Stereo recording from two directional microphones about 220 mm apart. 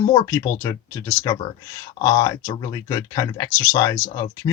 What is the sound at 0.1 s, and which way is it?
Speech, 15° left (ahead or behind).